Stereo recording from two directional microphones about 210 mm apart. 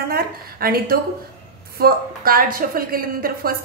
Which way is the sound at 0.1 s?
45° right (ahead or behind).